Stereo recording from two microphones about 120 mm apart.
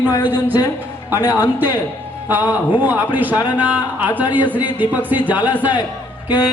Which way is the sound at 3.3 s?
35° left (ahead or behind).